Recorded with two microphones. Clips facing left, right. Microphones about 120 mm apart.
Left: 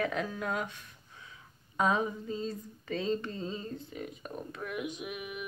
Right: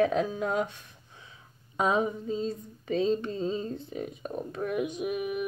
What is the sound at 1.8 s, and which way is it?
Mantra, 20° right (ahead or behind).